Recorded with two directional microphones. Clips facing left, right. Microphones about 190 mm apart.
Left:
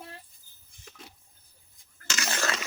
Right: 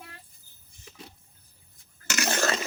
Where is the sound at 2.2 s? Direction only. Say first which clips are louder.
Right 5 dB; 45° right (ahead or behind).